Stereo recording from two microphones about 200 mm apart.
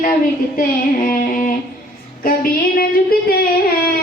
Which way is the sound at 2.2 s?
45° left (ahead or behind).